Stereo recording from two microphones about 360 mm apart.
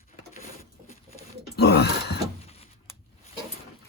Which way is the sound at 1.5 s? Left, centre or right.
Left.